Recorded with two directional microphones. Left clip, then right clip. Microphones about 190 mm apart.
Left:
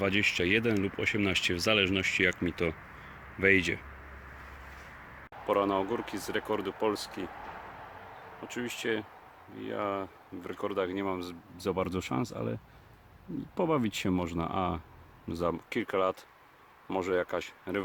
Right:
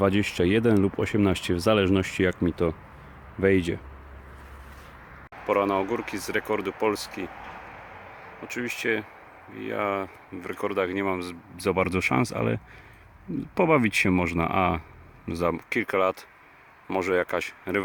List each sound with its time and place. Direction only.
0.0 s speech: 25° right (ahead or behind)
5.5 s speech: centre (ahead or behind)
8.4 s speech: centre (ahead or behind)
13.6 s speech: 5° right (ahead or behind)